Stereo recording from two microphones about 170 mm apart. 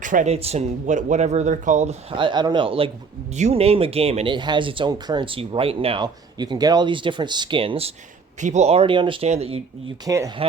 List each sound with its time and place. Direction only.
0.0 s speech: 50° right (ahead or behind)
0.3 s speech: 35° right (ahead or behind)
8.4 s speech: 45° right (ahead or behind)
10.1 s speech: 20° right (ahead or behind)